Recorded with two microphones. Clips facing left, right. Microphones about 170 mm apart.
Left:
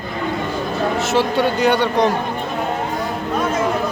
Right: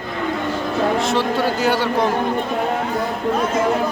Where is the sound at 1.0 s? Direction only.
Centre (ahead or behind).